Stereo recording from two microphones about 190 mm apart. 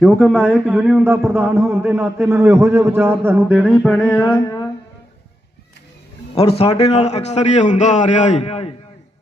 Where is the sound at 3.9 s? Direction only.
5° left (ahead or behind).